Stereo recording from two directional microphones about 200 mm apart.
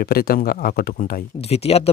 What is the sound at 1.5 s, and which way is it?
Speech, 30° left (ahead or behind).